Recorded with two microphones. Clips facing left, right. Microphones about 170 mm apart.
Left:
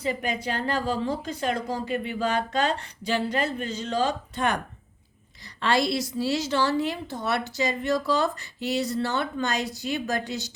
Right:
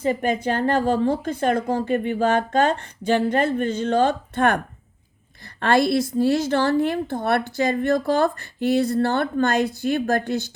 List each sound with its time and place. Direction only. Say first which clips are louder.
0.0 s a woman's voice: right 7 dB; 45° right (ahead or behind)